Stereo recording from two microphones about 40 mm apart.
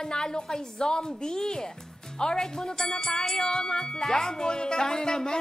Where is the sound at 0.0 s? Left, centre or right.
Centre.